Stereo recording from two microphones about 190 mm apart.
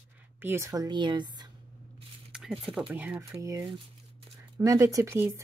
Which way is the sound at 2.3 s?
5° right (ahead or behind).